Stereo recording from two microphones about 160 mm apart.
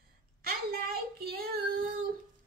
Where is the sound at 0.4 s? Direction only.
70° right (ahead or behind).